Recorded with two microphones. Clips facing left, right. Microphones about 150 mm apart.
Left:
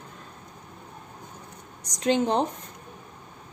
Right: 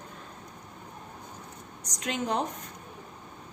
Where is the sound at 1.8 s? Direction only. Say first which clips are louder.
Left 8 dB; 30° left (ahead or behind).